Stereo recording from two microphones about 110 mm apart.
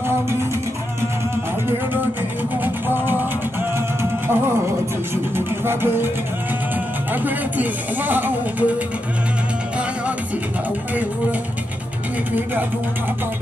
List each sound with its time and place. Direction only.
2.6 s music: 20° right (ahead or behind)
7.1 s speech: 15° right (ahead or behind)